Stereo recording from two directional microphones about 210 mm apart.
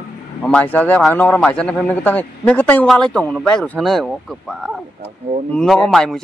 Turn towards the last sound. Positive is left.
turn(degrees=0)  # may be behind; listen again after turning